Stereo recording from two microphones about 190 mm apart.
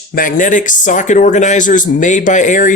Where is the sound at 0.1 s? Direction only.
45° left (ahead or behind).